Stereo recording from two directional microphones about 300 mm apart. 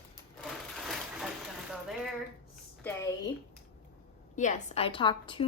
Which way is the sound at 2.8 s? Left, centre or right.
Centre.